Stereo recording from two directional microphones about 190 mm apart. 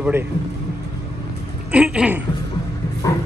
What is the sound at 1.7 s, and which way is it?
Speech, 5° right (ahead or behind).